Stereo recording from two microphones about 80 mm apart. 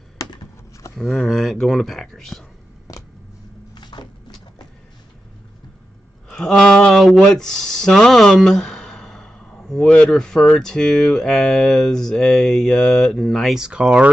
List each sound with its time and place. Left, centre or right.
0.9 s speech: centre
2.9 s a sound: left
3.7 s cupboard open or close: left
6.2 s speech: centre